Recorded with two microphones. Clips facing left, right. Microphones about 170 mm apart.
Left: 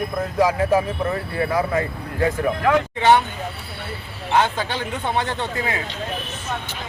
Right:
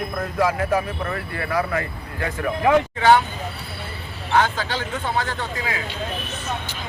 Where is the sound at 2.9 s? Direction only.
20° left (ahead or behind).